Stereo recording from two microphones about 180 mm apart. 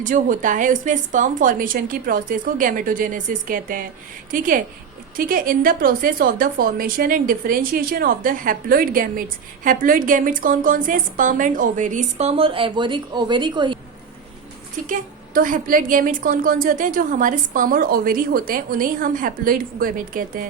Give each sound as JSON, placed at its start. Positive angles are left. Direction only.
{"t": 0.0, "sound": "a woman's voice", "side_deg": -45}
{"t": 14.8, "sound": "a woman's voice", "side_deg": -50}